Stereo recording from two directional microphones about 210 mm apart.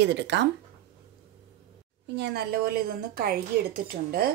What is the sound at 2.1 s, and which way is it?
A woman's voice, 50° right (ahead or behind).